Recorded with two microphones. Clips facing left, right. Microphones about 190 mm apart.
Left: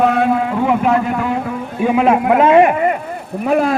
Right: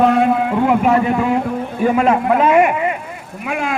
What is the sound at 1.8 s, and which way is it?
A man's voice, 15° left (ahead or behind).